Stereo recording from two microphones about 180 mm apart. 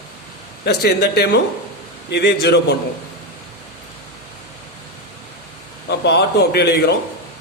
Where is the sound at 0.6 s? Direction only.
65° left (ahead or behind).